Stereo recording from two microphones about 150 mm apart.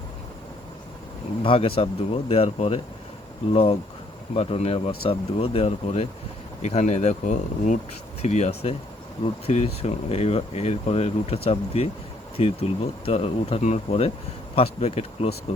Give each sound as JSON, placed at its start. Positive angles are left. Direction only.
{"t": 1.4, "sound": "speech", "side_deg": 35}